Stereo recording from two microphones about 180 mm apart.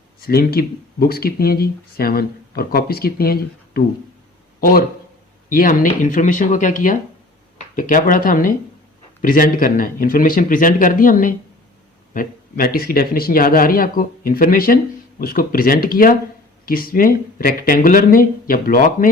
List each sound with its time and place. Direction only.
0.2 s speech: 55° left (ahead or behind)
5.5 s speech: 50° left (ahead or behind)